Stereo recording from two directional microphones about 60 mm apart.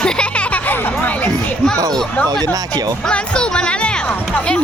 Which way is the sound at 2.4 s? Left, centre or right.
Right.